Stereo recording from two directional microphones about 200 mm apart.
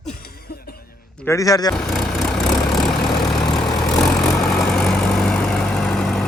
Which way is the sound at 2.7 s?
Centre (ahead or behind).